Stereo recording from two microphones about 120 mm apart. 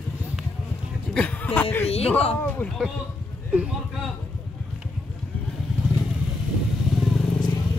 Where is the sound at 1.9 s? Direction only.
60° left (ahead or behind).